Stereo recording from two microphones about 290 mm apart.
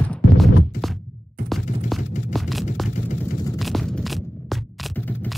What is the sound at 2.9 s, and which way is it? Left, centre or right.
Vehicle, left.